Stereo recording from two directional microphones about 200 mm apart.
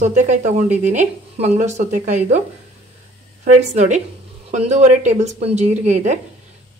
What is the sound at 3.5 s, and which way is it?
Speech, 35° right (ahead or behind).